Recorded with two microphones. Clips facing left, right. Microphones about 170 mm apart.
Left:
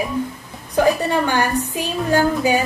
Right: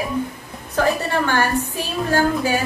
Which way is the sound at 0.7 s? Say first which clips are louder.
Left 3 dB; 15° left (ahead or behind).